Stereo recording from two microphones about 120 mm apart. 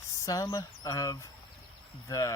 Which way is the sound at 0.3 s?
30° left (ahead or behind).